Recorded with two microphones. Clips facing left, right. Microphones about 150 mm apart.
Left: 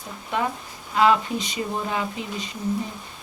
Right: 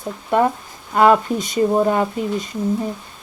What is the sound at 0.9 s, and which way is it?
Speech, 50° right (ahead or behind).